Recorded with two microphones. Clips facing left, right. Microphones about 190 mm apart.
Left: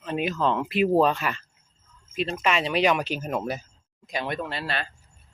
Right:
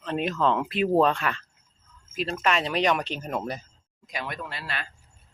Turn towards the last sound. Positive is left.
turn(degrees=30)  # may be behind; listen again after turning